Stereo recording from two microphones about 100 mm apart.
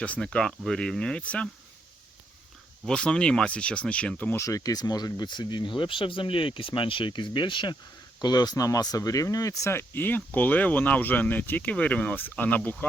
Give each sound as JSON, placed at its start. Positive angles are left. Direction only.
{"t": 0.0, "sound": "speech", "side_deg": 10}
{"t": 2.8, "sound": "speech", "side_deg": 10}
{"t": 4.4, "sound": "speech", "side_deg": 35}